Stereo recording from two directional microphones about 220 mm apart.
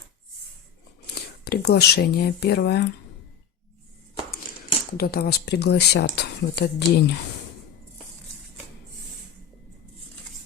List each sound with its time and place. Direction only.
1.1 s speech: 45° left (ahead or behind)
4.9 s speech: 45° left (ahead or behind)